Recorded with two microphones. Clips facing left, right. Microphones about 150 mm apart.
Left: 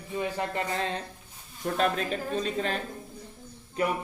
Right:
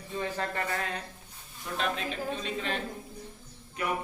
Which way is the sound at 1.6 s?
45° left (ahead or behind).